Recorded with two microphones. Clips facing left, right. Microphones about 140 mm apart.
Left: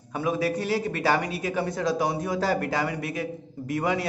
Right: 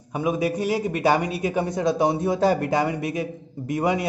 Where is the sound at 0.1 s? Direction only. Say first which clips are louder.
Right 2 dB; 15° right (ahead or behind).